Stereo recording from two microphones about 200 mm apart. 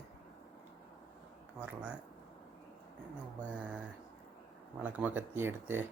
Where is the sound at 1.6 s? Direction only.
5° right (ahead or behind).